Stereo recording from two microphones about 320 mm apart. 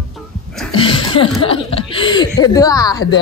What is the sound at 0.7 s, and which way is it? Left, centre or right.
Chuckle, centre.